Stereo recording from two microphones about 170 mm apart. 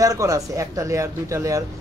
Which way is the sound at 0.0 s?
20° right (ahead or behind).